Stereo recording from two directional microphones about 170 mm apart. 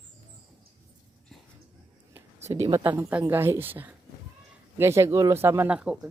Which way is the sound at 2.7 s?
15° right (ahead or behind).